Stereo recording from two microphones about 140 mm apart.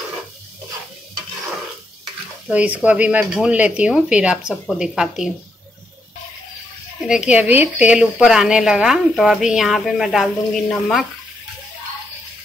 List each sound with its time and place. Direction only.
2.5 s a woman's voice: 10° right (ahead or behind)
7.1 s a woman's voice: 5° right (ahead or behind)